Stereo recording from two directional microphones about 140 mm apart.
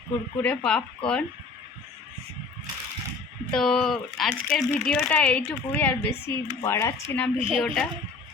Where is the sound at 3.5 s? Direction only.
5° left (ahead or behind); by 7.2 s 20° left (ahead or behind).